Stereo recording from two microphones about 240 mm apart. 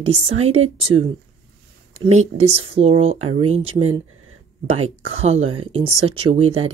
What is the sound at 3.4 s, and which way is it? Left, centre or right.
Speech, right.